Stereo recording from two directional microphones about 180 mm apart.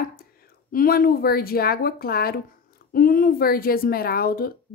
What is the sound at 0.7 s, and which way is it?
Speech, 55° left (ahead or behind).